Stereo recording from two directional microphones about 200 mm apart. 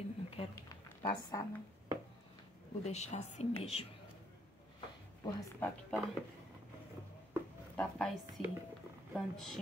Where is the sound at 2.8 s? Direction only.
35° left (ahead or behind).